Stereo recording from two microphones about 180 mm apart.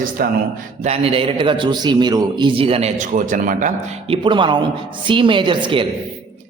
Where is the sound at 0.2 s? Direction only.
55° right (ahead or behind).